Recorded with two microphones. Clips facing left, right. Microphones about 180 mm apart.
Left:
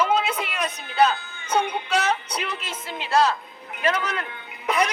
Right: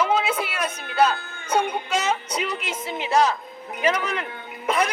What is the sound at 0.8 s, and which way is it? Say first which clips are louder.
Speech: even; 55° right (ahead or behind).